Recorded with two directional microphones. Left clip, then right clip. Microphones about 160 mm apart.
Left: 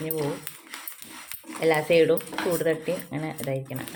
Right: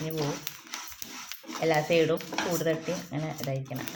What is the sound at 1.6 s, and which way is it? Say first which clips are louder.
Speech: left 4 dB; 30° left (ahead or behind).